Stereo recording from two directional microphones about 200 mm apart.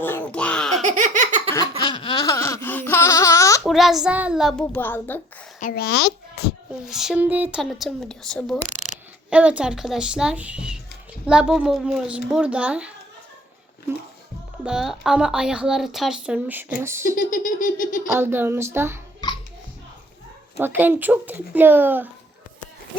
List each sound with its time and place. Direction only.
0.0 s baby laughter: 10° left (ahead or behind)
0.9 s laughter: 40° right (ahead or behind)
1.9 s a sound: 25° left (ahead or behind)
3.6 s speech: centre (ahead or behind)
5.5 s a child's voice: 45° left (ahead or behind)
6.8 s speech: centre (ahead or behind)
14.6 s speech: 5° right (ahead or behind)
17.2 s a sound: 40° left (ahead or behind)
18.2 s speech: 10° right (ahead or behind)
20.6 s speech: 10° right (ahead or behind)